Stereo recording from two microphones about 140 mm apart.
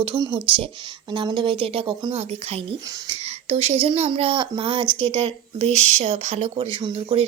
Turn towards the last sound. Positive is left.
turn(degrees=-40)  # may be behind; listen again after turning